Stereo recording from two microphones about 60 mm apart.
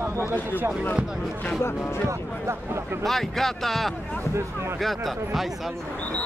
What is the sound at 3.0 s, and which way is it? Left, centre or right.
Speech, centre.